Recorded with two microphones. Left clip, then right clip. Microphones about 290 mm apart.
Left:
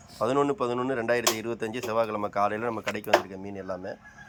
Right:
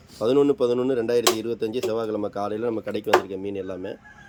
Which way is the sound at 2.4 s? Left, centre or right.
Centre.